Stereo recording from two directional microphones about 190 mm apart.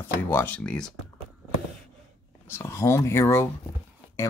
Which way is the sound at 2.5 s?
15° left (ahead or behind).